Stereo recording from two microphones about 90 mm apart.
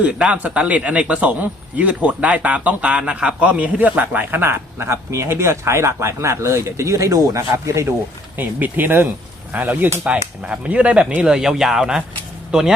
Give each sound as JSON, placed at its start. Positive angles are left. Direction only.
{"t": 0.0, "sound": "a man's voice", "side_deg": -15}
{"t": 8.4, "sound": "a man's voice", "side_deg": -20}